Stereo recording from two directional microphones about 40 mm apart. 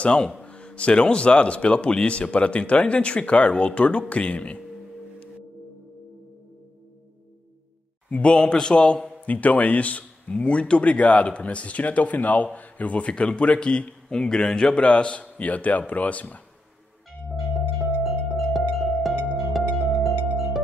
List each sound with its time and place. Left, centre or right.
0.0 s a man's voice: left
8.1 s a man's voice: left
9.2 s a man's voice: left
15.3 s a man's voice: left
17.6 s music: centre